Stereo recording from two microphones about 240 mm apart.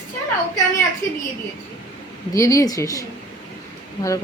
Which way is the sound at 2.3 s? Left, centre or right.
Centre.